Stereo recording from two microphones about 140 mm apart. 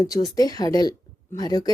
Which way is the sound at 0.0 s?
25° left (ahead or behind).